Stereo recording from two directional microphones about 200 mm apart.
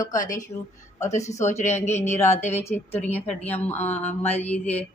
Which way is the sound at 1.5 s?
35° left (ahead or behind).